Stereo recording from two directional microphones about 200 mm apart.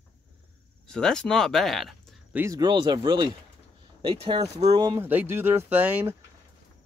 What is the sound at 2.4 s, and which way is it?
Speech, 20° right (ahead or behind).